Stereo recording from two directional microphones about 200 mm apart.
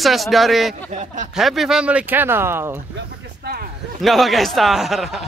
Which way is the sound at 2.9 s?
55° right (ahead or behind).